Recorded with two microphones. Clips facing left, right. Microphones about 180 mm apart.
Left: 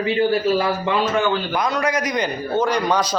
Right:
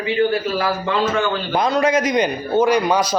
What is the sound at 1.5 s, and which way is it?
A man's voice, 25° right (ahead or behind).